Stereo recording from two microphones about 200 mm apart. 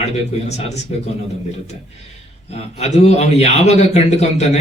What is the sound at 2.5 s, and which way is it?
A man's voice, 30° left (ahead or behind).